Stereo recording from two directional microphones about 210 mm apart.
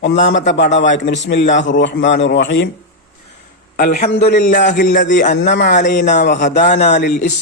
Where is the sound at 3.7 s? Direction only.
40° left (ahead or behind).